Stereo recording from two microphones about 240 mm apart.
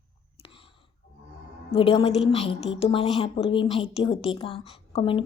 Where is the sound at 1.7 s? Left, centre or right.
Left.